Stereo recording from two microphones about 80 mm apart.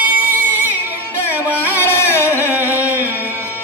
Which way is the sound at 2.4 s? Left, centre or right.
Right.